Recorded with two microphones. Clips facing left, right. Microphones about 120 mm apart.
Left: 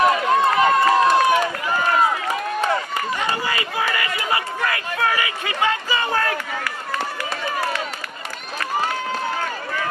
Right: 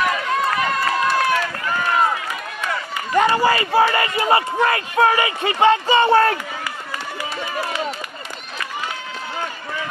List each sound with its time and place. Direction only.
0.0 s run: 25° left (ahead or behind)
3.2 s speech: 40° right (ahead or behind)